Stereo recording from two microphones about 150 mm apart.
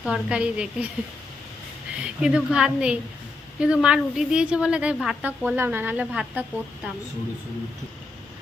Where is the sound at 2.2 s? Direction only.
5° right (ahead or behind).